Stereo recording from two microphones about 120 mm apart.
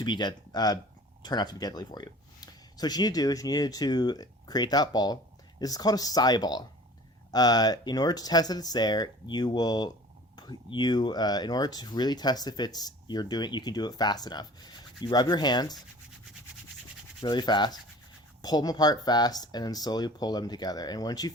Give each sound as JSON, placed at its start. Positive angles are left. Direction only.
{"t": 0.0, "sound": "speech", "side_deg": 40}
{"t": 17.2, "sound": "speech", "side_deg": 35}